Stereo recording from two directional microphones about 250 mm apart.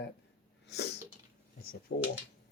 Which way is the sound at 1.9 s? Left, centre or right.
Left.